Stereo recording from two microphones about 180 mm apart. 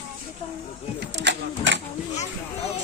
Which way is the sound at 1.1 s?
75° right (ahead or behind).